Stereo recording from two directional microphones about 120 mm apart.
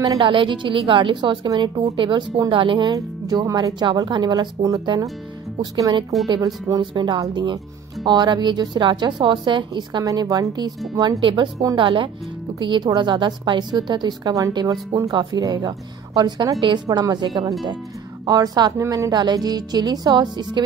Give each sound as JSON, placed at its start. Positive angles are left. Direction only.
{"t": 0.2, "sound": "a woman's voice", "side_deg": -45}
{"t": 11.5, "sound": "a woman's voice", "side_deg": -30}
{"t": 11.8, "sound": "a woman's voice", "side_deg": -45}